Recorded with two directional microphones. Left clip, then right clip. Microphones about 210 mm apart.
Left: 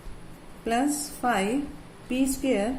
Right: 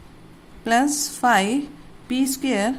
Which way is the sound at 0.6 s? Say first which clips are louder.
Right 7 dB; 50° right (ahead or behind).